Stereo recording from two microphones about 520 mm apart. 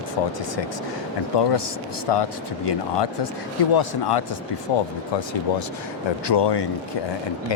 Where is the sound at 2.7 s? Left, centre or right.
Left.